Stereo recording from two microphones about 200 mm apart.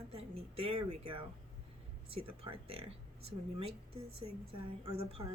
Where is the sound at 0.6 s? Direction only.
30° right (ahead or behind).